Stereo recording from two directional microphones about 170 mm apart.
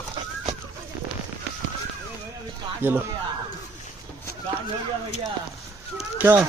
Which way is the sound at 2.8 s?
10° right (ahead or behind).